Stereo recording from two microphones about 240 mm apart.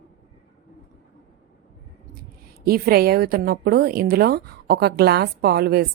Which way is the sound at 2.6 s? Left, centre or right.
Right.